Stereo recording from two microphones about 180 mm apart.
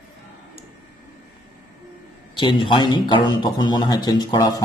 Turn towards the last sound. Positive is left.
turn(degrees=20)  # may be behind; listen again after turning